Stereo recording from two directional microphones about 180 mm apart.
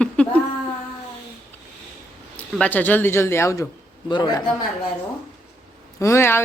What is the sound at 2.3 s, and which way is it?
A man's voice, 10° left (ahead or behind).